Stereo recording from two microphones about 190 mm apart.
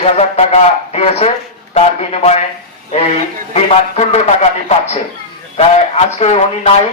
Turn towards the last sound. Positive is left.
turn(degrees=35)  # may be behind; listen again after turning